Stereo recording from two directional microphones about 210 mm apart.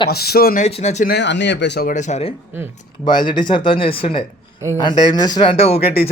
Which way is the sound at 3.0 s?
20° left (ahead or behind).